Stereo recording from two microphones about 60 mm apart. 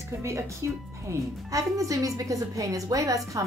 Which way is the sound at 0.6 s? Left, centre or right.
Right.